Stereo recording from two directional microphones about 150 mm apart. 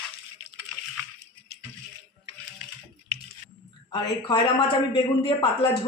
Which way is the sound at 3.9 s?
30° left (ahead or behind).